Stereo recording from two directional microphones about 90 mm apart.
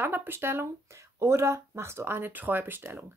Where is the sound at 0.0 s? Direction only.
25° right (ahead or behind).